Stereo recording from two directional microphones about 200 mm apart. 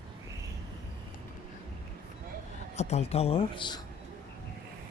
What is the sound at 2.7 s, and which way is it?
Speech, 35° left (ahead or behind).